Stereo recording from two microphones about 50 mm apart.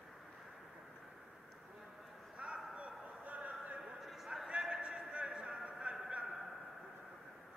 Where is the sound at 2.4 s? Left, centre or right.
Right.